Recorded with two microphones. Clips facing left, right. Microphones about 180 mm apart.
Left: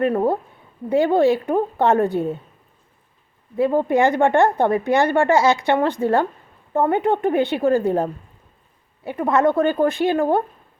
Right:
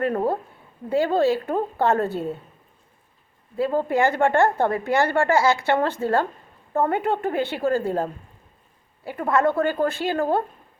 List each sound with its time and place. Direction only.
0.1 s a woman's voice: 15° left (ahead or behind)
3.5 s a woman's voice: 20° left (ahead or behind)